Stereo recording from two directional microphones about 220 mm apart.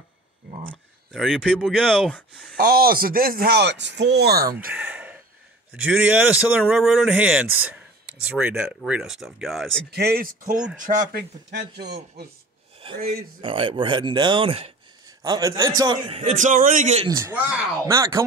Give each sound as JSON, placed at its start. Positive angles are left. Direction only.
{"t": 1.1, "sound": "a man's voice", "side_deg": 0}
{"t": 2.5, "sound": "speech", "side_deg": -40}
{"t": 4.6, "sound": "gasp", "side_deg": -5}
{"t": 5.7, "sound": "a man's voice", "side_deg": -5}
{"t": 9.8, "sound": "speech", "side_deg": -45}
{"t": 12.8, "sound": "a sound", "side_deg": -25}
{"t": 13.4, "sound": "speech", "side_deg": -25}
{"t": 17.1, "sound": "speech", "side_deg": -10}